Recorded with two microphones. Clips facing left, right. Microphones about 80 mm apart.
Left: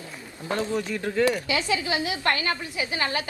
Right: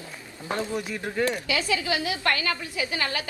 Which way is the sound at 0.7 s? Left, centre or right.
Centre.